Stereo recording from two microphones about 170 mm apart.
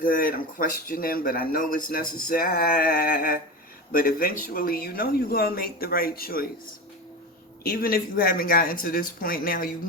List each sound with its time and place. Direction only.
0.0 s speech: 55° left (ahead or behind)
7.6 s speech: 60° left (ahead or behind)